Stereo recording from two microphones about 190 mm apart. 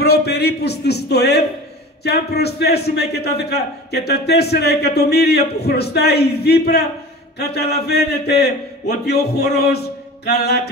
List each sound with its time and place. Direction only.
0.0 s a man's voice: 55° left (ahead or behind)